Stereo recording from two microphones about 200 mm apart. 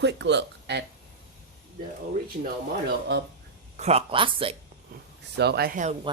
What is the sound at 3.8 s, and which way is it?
Speech, 30° right (ahead or behind).